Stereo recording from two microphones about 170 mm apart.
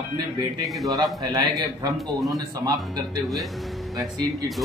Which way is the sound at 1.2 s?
25° right (ahead or behind).